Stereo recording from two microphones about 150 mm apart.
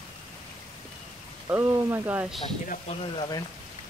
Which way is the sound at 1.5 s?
15° right (ahead or behind).